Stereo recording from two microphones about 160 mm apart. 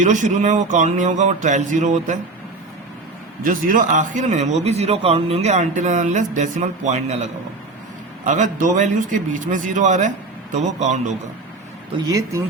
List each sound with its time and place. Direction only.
0.0 s speech: 50° right (ahead or behind)
3.4 s speech: 60° right (ahead or behind)
8.2 s speech: 50° right (ahead or behind)
12.0 s speech: 25° right (ahead or behind)